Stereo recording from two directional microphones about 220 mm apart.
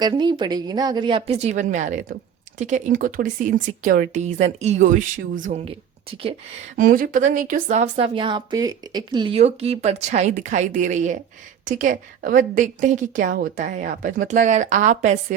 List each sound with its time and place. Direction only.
0.0 s a woman's voice: 20° right (ahead or behind)
6.7 s speech: 40° right (ahead or behind)